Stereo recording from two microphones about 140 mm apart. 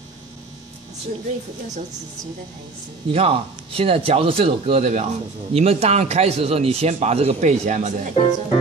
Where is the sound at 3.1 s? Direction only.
45° right (ahead or behind).